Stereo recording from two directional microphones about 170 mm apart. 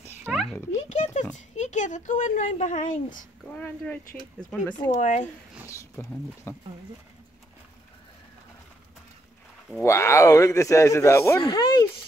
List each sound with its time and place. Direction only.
0.2 s a sound: 5° right (ahead or behind)
0.8 s a sound: 45° left (ahead or behind)
1.3 s speech: 45° left (ahead or behind)
3.4 s speech: 10° left (ahead or behind)
4.9 s speech: 40° left (ahead or behind)
6.0 s speech: 15° left (ahead or behind)
9.8 s speech: 15° left (ahead or behind)
11.4 s speech: 25° left (ahead or behind)